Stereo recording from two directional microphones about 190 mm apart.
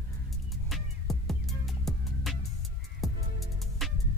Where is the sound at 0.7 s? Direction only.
Centre (ahead or behind).